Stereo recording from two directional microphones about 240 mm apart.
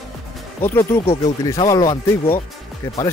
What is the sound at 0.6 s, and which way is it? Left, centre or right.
Speech, centre.